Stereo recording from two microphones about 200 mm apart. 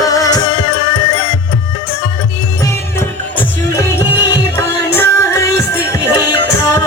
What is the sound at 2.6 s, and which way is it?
Music, 15° left (ahead or behind).